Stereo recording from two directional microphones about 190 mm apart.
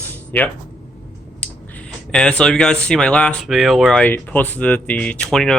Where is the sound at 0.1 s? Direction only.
10° left (ahead or behind).